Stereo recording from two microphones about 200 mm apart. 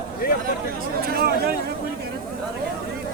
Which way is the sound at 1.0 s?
50° right (ahead or behind).